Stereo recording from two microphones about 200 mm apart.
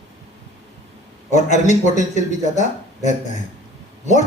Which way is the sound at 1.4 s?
35° left (ahead or behind).